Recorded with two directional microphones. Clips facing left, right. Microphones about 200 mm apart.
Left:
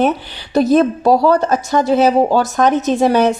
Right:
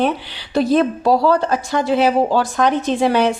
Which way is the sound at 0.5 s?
45° left (ahead or behind).